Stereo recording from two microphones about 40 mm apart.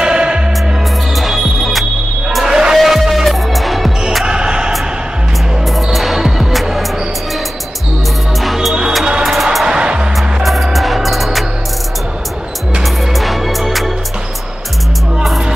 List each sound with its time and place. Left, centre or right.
0.0 s music: right
1.1 s music: centre
4.3 s music: right
5.9 s music: centre
9.2 s music: centre
9.7 s music: right
10.1 s music: centre
13.1 s music: centre